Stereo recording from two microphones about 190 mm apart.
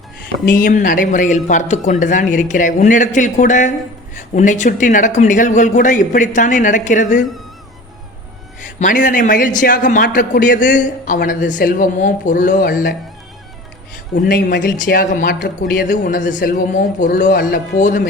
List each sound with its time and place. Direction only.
0.4 s a man's voice: 45° left (ahead or behind)
8.6 s a man's voice: 40° left (ahead or behind)
14.3 s speech: 60° left (ahead or behind)
14.8 s a man's voice: 50° left (ahead or behind)